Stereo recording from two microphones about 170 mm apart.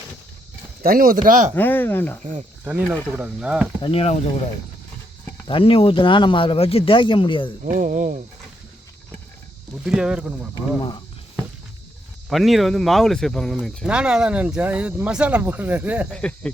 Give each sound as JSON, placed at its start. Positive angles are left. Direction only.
{"t": 0.8, "sound": "speech", "side_deg": -60}
{"t": 1.5, "sound": "speech", "side_deg": 10}
{"t": 2.6, "sound": "speech", "side_deg": -10}
{"t": 3.8, "sound": "speech", "side_deg": 30}
{"t": 5.5, "sound": "speech", "side_deg": 30}
{"t": 7.6, "sound": "speech", "side_deg": -50}
{"t": 9.8, "sound": "speech", "side_deg": -5}
{"t": 10.8, "sound": "speech", "side_deg": 30}
{"t": 12.3, "sound": "speech", "side_deg": 0}
{"t": 16.1, "sound": "speech", "side_deg": 5}